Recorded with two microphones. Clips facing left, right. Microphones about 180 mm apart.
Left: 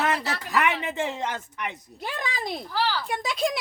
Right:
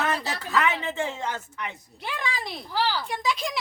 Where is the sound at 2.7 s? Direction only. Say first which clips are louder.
Right 2 dB; 15° right (ahead or behind).